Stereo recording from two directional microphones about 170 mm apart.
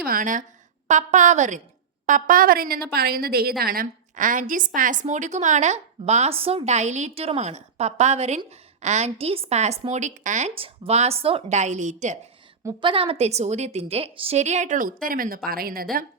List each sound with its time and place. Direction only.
0.0 s a woman's voice: 55° right (ahead or behind)
10.5 s a woman's voice: 35° right (ahead or behind)
12.8 s a woman's voice: 30° right (ahead or behind); by 16.0 s 60° right (ahead or behind)